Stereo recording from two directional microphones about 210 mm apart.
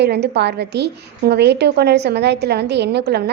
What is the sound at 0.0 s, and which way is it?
A woman's voice, 50° right (ahead or behind).